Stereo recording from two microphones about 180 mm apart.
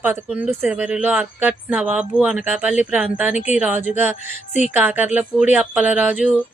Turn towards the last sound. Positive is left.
turn(degrees=-10)  # may be behind; listen again after turning